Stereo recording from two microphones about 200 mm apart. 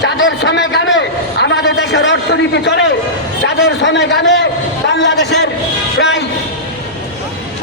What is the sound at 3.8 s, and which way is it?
A man's voice, 60° left (ahead or behind).